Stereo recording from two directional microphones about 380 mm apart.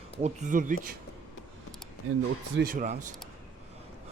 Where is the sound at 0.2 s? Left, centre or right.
Centre.